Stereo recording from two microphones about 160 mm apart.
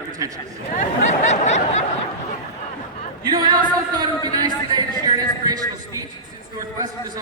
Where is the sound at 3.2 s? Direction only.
25° right (ahead or behind).